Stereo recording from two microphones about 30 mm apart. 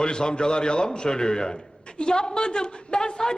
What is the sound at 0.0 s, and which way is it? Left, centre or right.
A man's voice, left.